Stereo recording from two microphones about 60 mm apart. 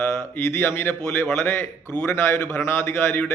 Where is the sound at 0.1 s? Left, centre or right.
Left.